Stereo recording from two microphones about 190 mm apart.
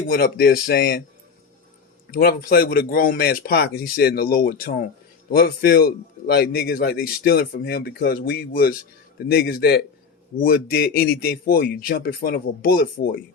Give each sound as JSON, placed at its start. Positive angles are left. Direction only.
{"t": 0.1, "sound": "speech", "side_deg": 55}
{"t": 2.0, "sound": "a man's voice", "side_deg": 50}